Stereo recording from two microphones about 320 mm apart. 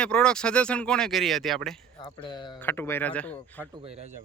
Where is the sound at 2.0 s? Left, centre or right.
Centre.